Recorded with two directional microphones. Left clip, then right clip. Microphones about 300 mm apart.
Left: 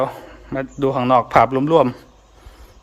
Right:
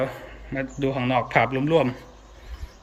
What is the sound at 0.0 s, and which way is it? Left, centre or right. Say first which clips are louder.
Speech: left 6 dB; centre.